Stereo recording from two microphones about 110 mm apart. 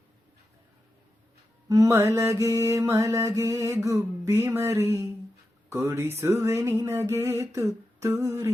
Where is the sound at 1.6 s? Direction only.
35° right (ahead or behind).